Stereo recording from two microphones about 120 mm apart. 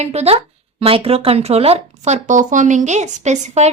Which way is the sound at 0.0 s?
65° right (ahead or behind).